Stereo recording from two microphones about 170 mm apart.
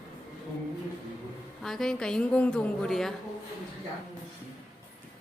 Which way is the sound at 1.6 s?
Centre (ahead or behind).